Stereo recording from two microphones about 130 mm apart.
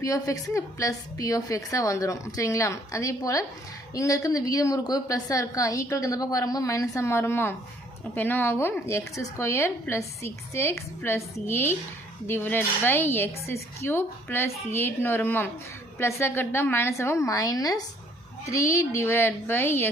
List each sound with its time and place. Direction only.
0.0 s a woman's voice: 25° left (ahead or behind)